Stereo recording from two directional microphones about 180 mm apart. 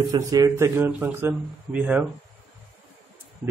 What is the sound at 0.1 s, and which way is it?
Speech, 20° right (ahead or behind).